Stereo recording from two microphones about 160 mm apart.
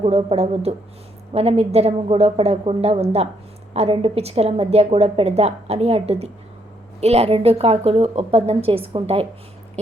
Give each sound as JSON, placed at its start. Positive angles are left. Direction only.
{"t": 0.0, "sound": "a woman's voice", "side_deg": -35}